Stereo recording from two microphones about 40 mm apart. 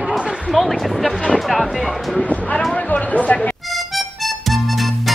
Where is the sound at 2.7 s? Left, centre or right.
Left.